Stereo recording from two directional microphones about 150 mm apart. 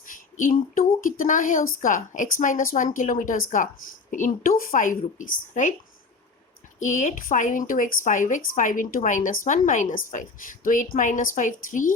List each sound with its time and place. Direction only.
0.1 s a woman's voice: 65° left (ahead or behind)
6.7 s a woman's voice: 60° left (ahead or behind)